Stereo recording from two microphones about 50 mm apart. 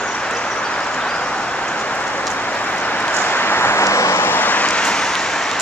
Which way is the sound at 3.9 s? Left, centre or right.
Left.